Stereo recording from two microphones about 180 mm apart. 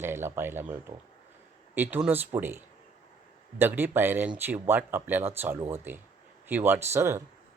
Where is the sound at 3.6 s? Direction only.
10° right (ahead or behind).